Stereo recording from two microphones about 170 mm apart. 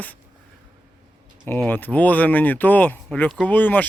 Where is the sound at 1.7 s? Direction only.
10° left (ahead or behind).